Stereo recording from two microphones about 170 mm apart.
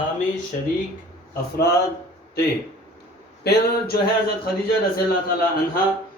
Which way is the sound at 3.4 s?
70° left (ahead or behind).